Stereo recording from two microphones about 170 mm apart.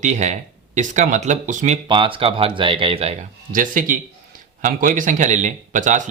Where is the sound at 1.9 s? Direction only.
30° right (ahead or behind).